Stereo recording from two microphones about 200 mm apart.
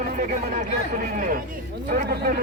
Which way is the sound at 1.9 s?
45° right (ahead or behind).